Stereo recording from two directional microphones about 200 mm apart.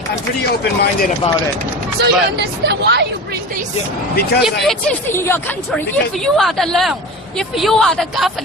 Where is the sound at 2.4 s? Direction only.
55° right (ahead or behind).